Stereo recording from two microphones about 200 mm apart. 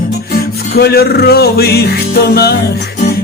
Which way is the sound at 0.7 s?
50° left (ahead or behind).